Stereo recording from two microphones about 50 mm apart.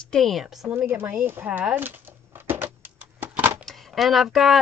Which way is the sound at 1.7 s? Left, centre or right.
Right.